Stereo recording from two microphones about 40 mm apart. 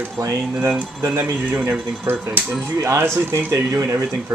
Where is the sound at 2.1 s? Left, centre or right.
Right.